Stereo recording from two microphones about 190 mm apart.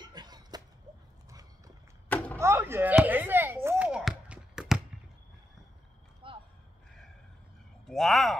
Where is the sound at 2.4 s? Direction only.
15° right (ahead or behind).